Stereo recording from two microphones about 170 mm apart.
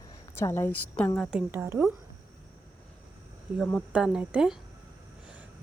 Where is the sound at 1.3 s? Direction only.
10° right (ahead or behind).